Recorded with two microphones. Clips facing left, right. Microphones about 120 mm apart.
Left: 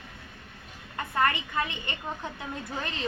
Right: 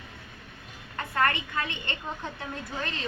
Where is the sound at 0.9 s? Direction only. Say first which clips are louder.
Even; 15° left (ahead or behind).